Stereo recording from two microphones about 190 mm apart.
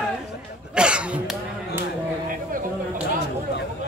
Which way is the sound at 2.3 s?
45° right (ahead or behind).